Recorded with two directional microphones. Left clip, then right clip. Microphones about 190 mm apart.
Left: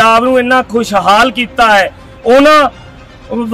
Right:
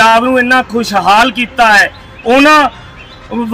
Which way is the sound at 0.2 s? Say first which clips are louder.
Even; 20° left (ahead or behind).